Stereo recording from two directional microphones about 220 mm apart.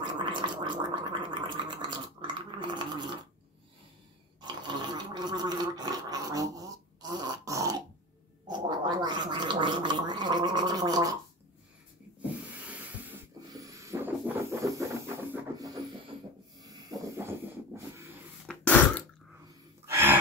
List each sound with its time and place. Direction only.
0.0 s gargling: 20° right (ahead or behind)
4.4 s gargling: 20° right (ahead or behind)
12.6 s rub: 5° right (ahead or behind)
15.3 s a sound: 15° right (ahead or behind)
18.5 s a sound: 5° left (ahead or behind)
19.9 s sigh: 10° right (ahead or behind)